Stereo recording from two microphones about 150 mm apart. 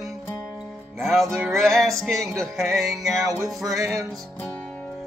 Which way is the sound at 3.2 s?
20° right (ahead or behind).